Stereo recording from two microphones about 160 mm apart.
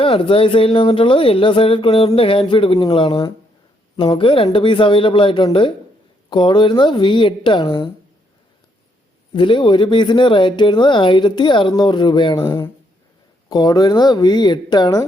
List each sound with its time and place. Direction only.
0.0 s speech: 35° left (ahead or behind)
9.3 s speech: 30° left (ahead or behind)